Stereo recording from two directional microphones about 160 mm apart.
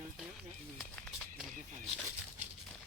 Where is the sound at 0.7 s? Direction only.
Centre (ahead or behind).